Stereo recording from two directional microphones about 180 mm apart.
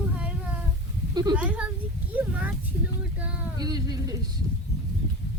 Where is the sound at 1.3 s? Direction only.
5° right (ahead or behind).